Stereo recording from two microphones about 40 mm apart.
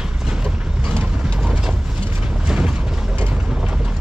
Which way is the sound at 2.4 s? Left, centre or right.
Centre.